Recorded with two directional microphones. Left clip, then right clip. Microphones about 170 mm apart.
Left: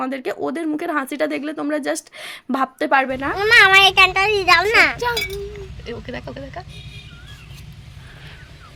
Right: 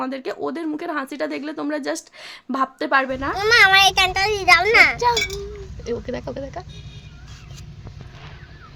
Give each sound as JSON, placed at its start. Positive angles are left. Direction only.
{"t": 0.0, "sound": "speech", "side_deg": 15}
{"t": 3.3, "sound": "a child's voice", "side_deg": 35}
{"t": 4.9, "sound": "speech", "side_deg": 0}
{"t": 5.8, "sound": "speech", "side_deg": -40}